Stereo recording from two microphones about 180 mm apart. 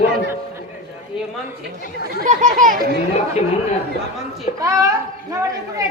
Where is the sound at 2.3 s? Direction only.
45° right (ahead or behind).